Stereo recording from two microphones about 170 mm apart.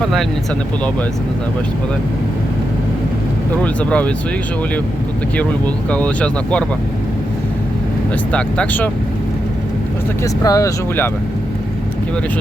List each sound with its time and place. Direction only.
3.6 s speech: 5° left (ahead or behind)
5.4 s speech: 10° left (ahead or behind)
8.3 s speech: 5° left (ahead or behind)
10.4 s speech: 20° left (ahead or behind)